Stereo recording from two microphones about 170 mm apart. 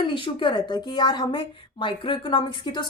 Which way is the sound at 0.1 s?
30° left (ahead or behind).